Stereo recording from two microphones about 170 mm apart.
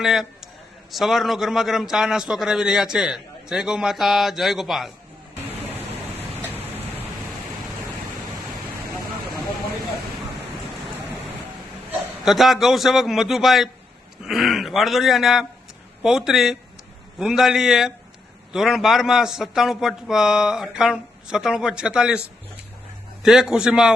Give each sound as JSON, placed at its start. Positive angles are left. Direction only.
{"t": 0.0, "sound": "a man's voice", "side_deg": 0}
{"t": 5.7, "sound": "a sound", "side_deg": -10}
{"t": 12.2, "sound": "a man's voice", "side_deg": 0}
{"t": 23.2, "sound": "a man's voice", "side_deg": -5}